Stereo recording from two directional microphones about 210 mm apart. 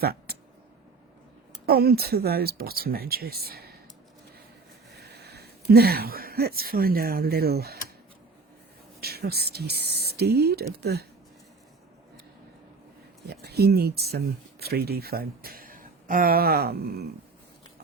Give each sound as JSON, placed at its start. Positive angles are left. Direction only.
{"t": 0.0, "sound": "speech", "side_deg": -45}
{"t": 1.6, "sound": "speech", "side_deg": -50}
{"t": 4.9, "sound": "speech", "side_deg": -50}
{"t": 9.0, "sound": "speech", "side_deg": -50}
{"t": 13.2, "sound": "speech", "side_deg": -50}